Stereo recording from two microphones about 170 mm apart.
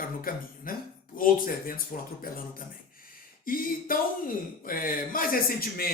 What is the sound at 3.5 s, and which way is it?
Speech, 55° left (ahead or behind).